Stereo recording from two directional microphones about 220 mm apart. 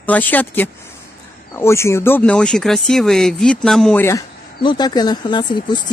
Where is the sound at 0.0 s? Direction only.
10° left (ahead or behind).